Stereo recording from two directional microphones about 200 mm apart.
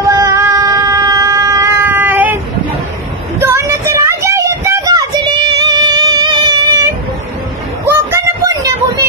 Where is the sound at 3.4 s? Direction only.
15° right (ahead or behind).